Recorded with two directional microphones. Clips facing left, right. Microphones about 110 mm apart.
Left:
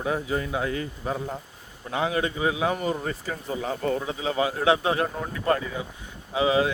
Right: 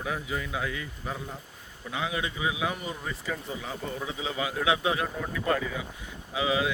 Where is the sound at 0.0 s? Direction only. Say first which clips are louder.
Left 6 dB; 35° left (ahead or behind).